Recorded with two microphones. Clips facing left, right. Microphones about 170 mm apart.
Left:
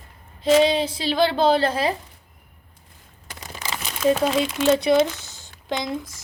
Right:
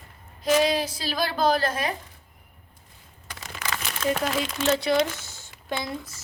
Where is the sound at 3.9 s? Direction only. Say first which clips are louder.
Left 7 dB; 10° left (ahead or behind).